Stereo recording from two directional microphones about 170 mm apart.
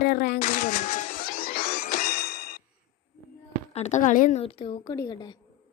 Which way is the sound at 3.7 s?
40° left (ahead or behind).